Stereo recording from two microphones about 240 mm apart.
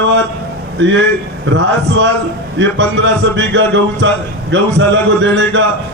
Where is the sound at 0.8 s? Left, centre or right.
Right.